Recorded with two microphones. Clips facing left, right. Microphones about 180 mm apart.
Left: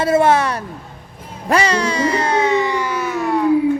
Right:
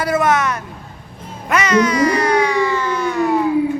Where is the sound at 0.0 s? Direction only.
30° left (ahead or behind).